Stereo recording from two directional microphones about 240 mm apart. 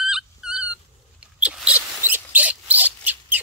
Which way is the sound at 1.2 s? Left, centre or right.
Centre.